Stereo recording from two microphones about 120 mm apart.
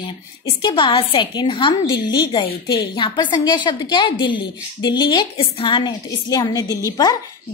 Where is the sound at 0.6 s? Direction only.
40° left (ahead or behind).